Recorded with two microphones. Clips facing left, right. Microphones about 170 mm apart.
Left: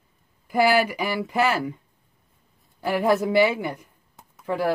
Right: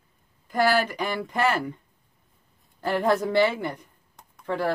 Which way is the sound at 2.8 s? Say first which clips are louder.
Left 2 dB; 10° left (ahead or behind).